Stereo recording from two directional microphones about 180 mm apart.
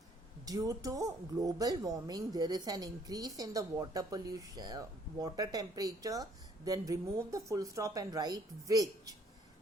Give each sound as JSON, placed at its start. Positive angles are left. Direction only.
{"t": 0.4, "sound": "speech", "side_deg": -20}